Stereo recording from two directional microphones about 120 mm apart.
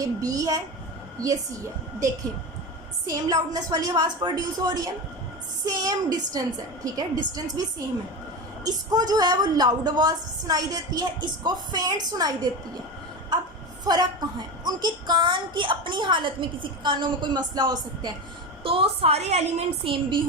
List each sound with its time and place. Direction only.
0.0 s a woman's voice: 30° right (ahead or behind)
3.1 s a woman's voice: 30° right (ahead or behind)
8.6 s a woman's voice: 30° right (ahead or behind)
13.8 s a woman's voice: 35° right (ahead or behind)
18.6 s a woman's voice: 50° right (ahead or behind)